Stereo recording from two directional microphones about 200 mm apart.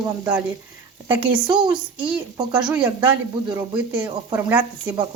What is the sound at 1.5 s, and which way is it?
Speech, 20° right (ahead or behind).